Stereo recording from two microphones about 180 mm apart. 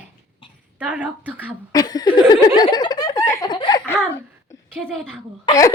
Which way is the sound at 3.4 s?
25° left (ahead or behind).